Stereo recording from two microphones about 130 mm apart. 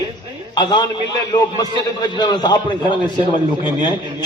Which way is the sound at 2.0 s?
35° left (ahead or behind).